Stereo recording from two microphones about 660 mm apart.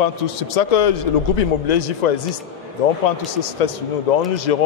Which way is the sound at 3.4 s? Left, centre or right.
Left.